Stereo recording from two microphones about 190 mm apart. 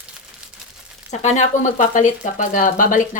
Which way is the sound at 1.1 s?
40° left (ahead or behind).